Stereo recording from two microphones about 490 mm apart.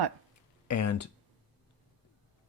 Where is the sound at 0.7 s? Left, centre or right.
Left.